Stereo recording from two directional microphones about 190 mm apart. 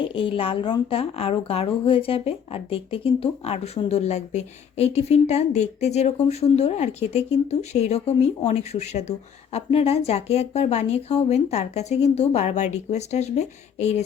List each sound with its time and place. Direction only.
0.0 s speech: 25° left (ahead or behind)